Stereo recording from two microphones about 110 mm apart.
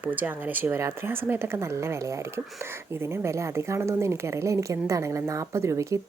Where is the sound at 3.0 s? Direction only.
25° right (ahead or behind).